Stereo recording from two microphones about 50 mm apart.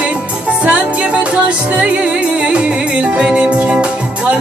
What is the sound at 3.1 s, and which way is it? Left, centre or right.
Music, centre.